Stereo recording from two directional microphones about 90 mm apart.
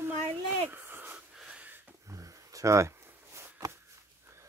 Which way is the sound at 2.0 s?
40° right (ahead or behind).